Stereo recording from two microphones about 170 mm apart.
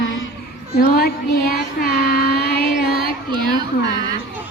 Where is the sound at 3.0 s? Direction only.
25° right (ahead or behind).